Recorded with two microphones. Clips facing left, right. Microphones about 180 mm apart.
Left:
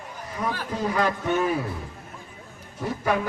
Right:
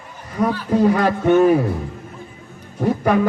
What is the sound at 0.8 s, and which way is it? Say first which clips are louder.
Speech: right 9 dB; 55° right (ahead or behind).